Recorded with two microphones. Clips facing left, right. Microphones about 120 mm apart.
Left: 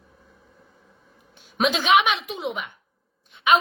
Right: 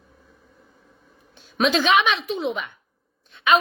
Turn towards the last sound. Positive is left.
turn(degrees=15)  # may be behind; listen again after turning